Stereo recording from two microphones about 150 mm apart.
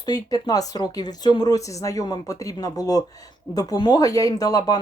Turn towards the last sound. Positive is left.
turn(degrees=25)  # may be behind; listen again after turning